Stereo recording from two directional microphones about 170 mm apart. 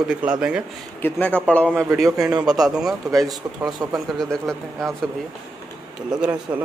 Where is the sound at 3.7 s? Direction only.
20° right (ahead or behind).